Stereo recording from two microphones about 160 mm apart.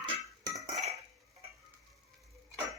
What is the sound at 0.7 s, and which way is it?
Cutlery, 45° right (ahead or behind).